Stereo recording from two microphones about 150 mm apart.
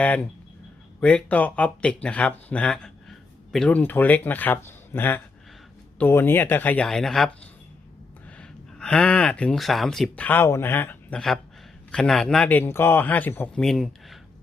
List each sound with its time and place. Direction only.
0.9 s speech: 5° left (ahead or behind)
8.4 s speech: 5° left (ahead or behind)
13.7 s speech: centre (ahead or behind)